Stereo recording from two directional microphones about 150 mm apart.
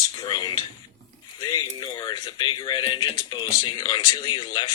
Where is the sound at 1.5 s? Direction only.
30° left (ahead or behind).